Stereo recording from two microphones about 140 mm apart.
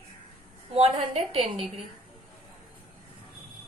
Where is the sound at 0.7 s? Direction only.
45° right (ahead or behind).